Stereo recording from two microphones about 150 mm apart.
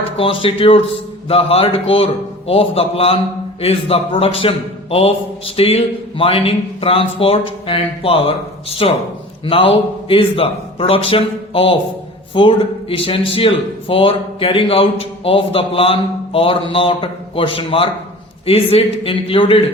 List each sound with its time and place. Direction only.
0.2 s a man's voice: 35° left (ahead or behind)